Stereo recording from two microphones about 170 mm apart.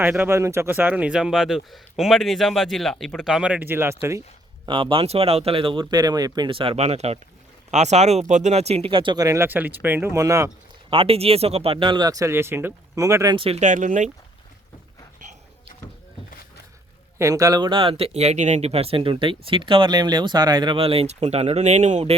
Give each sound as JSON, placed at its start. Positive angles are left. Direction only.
{"t": 0.0, "sound": "speech", "side_deg": -10}
{"t": 4.6, "sound": "speech", "side_deg": -30}
{"t": 10.8, "sound": "speech", "side_deg": -35}
{"t": 13.3, "sound": "speech", "side_deg": -35}
{"t": 15.2, "sound": "a sound", "side_deg": -50}
{"t": 17.2, "sound": "speech", "side_deg": -20}